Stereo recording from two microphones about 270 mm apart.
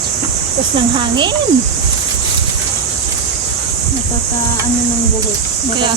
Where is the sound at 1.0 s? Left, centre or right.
Centre.